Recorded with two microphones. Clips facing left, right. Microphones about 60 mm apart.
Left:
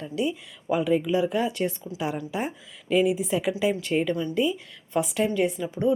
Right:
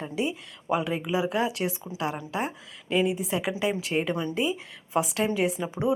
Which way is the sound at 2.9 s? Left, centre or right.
Centre.